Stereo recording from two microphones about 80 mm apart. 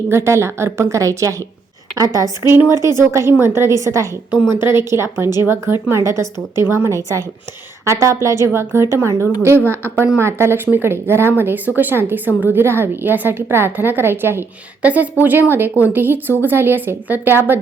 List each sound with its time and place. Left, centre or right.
0.1 s a woman's voice: right
2.5 s speech: right
4.4 s speech: right
7.9 s a woman's voice: right
14.8 s a woman's voice: centre